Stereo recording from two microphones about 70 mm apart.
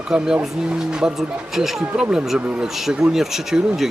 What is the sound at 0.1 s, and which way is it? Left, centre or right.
Speech, centre.